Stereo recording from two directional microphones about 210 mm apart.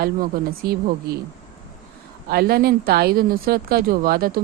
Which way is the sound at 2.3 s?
50° right (ahead or behind).